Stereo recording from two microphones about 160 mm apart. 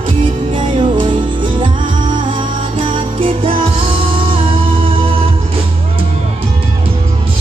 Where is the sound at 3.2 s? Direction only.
35° right (ahead or behind).